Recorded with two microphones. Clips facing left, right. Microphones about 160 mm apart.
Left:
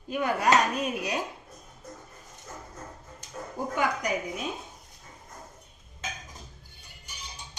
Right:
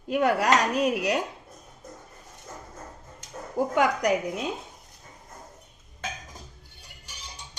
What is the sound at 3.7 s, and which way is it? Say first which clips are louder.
Speech: right 5 dB; 70° right (ahead or behind).